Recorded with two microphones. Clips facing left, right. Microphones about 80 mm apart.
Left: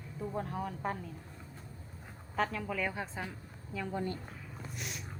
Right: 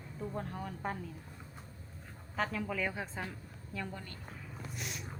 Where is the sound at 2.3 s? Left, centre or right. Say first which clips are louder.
Left 2 dB; centre.